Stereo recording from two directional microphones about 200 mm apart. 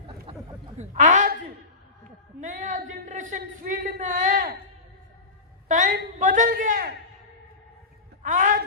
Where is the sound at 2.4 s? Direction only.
40° right (ahead or behind).